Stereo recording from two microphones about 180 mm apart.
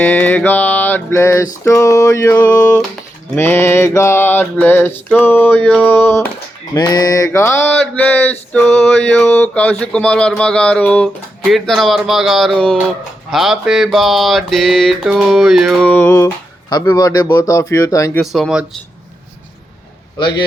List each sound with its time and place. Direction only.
0.0 s mantra: 10° left (ahead or behind)
6.7 s mantra: 20° left (ahead or behind)
18.2 s mantra: centre (ahead or behind)
20.1 s speech: 25° left (ahead or behind)